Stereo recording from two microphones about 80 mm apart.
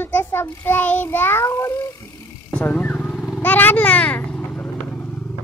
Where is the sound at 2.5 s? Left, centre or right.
Centre.